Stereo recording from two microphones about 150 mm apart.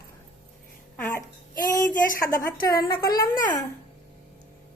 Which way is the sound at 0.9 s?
15° left (ahead or behind).